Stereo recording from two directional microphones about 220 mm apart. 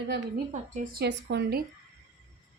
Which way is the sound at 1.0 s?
50° right (ahead or behind).